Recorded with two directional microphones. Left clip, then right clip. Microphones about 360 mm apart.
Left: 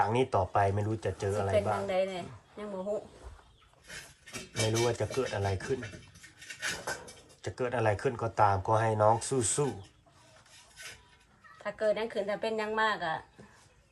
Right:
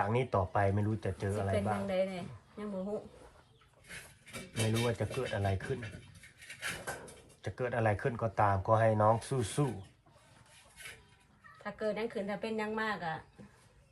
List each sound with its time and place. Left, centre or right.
0.0 s speech: centre
1.5 s a woman's voice: left
4.5 s speech: centre
7.4 s speech: centre
11.6 s a woman's voice: left